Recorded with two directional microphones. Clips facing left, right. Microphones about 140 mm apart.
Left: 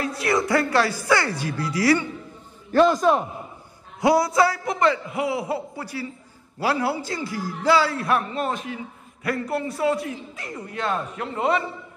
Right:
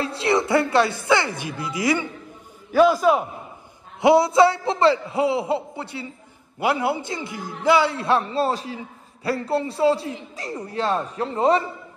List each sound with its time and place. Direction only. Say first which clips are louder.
0.0 s a man's voice: right 2 dB; 25° right (ahead or behind)
2.7 s a man's voice: right 1 dB; 5° right (ahead or behind)
4.0 s a man's voice: right 4 dB; 25° right (ahead or behind)